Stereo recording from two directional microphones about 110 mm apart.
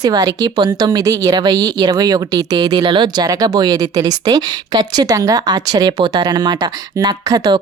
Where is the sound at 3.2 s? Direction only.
35° right (ahead or behind).